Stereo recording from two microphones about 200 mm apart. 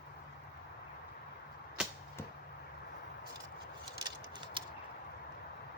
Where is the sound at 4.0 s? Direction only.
25° right (ahead or behind).